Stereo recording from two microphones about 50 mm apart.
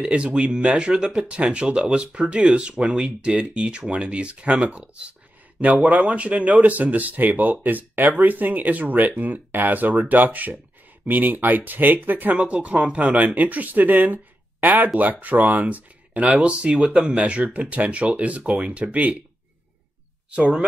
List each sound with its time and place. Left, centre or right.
0.0 s speech: right
2.7 s speech: centre; by 12.4 s right
12.6 s speech: right
20.3 s speech: right